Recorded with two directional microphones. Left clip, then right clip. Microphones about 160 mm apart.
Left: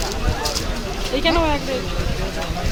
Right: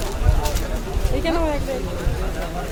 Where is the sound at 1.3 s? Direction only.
55° left (ahead or behind).